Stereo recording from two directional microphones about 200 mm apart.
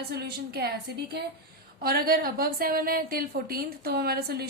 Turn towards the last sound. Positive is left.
turn(degrees=-50)  # may be behind; listen again after turning